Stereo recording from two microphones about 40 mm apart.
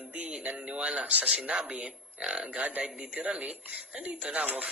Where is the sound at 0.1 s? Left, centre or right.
Right.